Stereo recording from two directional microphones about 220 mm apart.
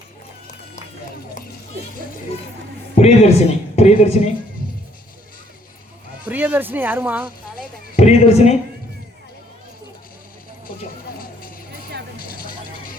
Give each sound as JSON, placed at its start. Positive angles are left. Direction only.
{"t": 3.0, "sound": "speech", "side_deg": 30}
{"t": 6.2, "sound": "speech", "side_deg": -5}
{"t": 7.9, "sound": "speech", "side_deg": 30}
{"t": 12.2, "sound": "vehicle", "side_deg": 40}